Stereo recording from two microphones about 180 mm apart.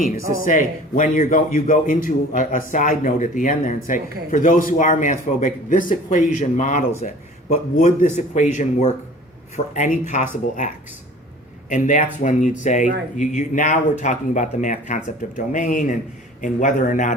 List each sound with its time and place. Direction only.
0.0 s a man's voice: 50° left (ahead or behind)
11.7 s a man's voice: 45° left (ahead or behind)